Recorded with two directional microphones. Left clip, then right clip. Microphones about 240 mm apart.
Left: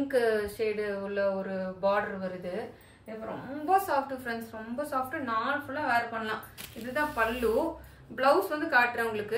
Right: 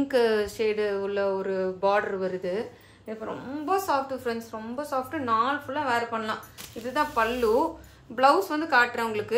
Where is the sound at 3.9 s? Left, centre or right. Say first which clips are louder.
Right 3 dB; right.